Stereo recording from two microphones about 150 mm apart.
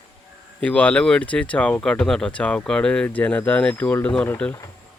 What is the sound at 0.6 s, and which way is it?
Speech, 10° left (ahead or behind).